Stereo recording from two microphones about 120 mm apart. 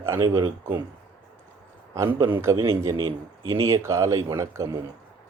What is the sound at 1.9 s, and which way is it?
Speech, 25° right (ahead or behind).